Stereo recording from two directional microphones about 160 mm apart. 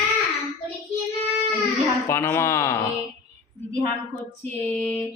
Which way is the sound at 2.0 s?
15° left (ahead or behind).